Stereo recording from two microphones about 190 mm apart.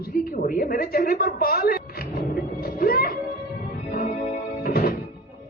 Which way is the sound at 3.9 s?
50° left (ahead or behind).